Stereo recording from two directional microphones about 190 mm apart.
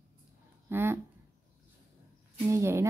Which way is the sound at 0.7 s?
10° right (ahead or behind).